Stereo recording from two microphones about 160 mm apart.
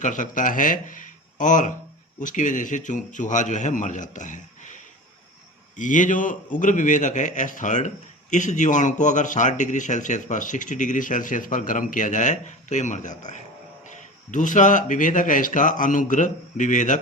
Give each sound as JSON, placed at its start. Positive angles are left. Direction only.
{"t": 0.0, "sound": "a man's voice", "side_deg": 50}